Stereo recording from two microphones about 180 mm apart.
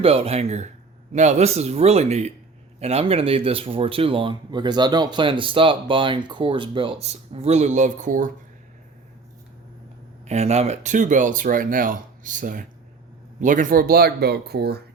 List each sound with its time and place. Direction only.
0.0 s speech: 35° right (ahead or behind)
10.2 s speech: 40° right (ahead or behind); by 14.8 s 65° right (ahead or behind)